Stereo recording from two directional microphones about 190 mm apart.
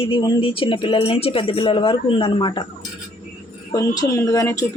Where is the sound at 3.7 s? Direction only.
20° left (ahead or behind).